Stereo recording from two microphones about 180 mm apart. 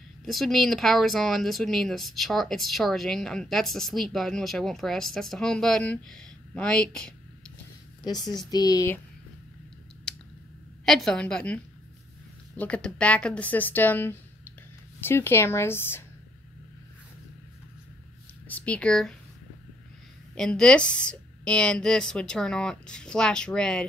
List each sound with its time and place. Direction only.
0.2 s speech: centre (ahead or behind)
8.0 s a woman's voice: 25° left (ahead or behind)
10.9 s speech: centre (ahead or behind)
18.5 s speech: 5° left (ahead or behind)
20.3 s speech: 5° left (ahead or behind)